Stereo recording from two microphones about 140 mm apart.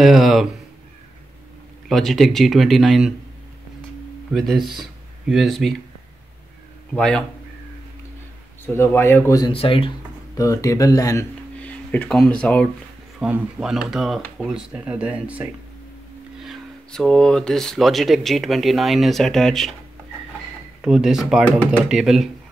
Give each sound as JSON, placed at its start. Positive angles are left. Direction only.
{"t": 0.0, "sound": "speech", "side_deg": 0}
{"t": 1.9, "sound": "speech", "side_deg": 0}
{"t": 4.3, "sound": "speech", "side_deg": 0}
{"t": 6.9, "sound": "speech", "side_deg": 5}
{"t": 8.7, "sound": "speech", "side_deg": 15}
{"t": 9.5, "sound": "speech", "side_deg": 40}
{"t": 10.3, "sound": "speech", "side_deg": 25}
{"t": 11.6, "sound": "speech", "side_deg": 10}
{"t": 13.2, "sound": "speech", "side_deg": -10}
{"t": 16.4, "sound": "speech", "side_deg": 0}
{"t": 20.8, "sound": "speech", "side_deg": -5}